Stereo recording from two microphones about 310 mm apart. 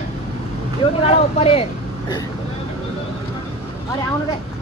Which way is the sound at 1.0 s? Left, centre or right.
Centre.